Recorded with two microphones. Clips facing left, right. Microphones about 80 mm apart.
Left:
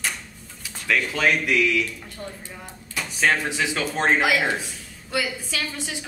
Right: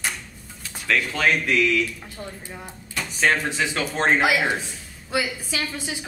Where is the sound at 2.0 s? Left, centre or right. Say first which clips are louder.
Even; centre.